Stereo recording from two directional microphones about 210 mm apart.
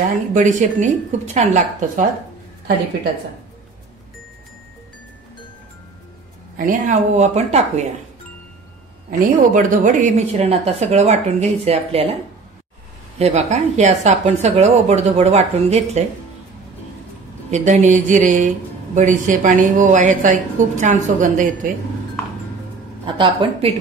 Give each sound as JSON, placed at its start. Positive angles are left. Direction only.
{"t": 0.1, "sound": "speech", "side_deg": -35}
{"t": 6.5, "sound": "speech", "side_deg": -40}
{"t": 9.5, "sound": "speech", "side_deg": -40}
{"t": 13.2, "sound": "speech", "side_deg": -30}
{"t": 17.5, "sound": "speech", "side_deg": -35}
{"t": 23.0, "sound": "a woman's voice", "side_deg": -25}